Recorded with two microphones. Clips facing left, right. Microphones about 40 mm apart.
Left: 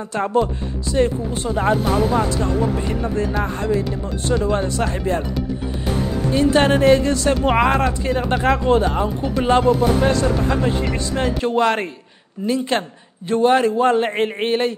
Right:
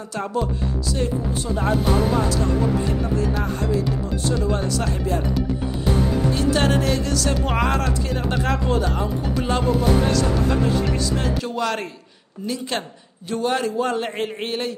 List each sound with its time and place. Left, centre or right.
0.1 s speech: left
4.5 s speech: left
6.3 s speech: left